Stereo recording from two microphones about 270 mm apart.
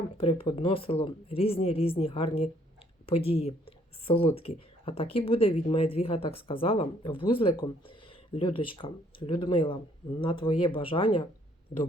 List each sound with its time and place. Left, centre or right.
0.2 s speech: left